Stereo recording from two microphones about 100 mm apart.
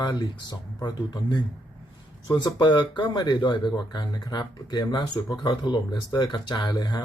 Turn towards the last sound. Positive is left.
turn(degrees=45)  # may be behind; listen again after turning